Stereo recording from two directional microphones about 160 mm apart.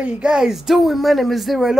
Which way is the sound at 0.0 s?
5° right (ahead or behind).